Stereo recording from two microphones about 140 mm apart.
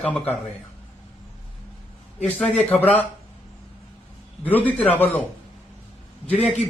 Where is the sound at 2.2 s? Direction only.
10° left (ahead or behind).